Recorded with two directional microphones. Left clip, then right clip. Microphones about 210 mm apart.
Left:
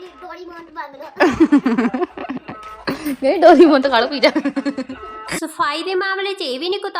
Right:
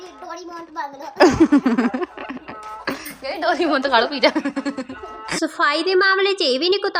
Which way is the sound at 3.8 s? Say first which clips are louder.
Left 2 dB; 20° right (ahead or behind).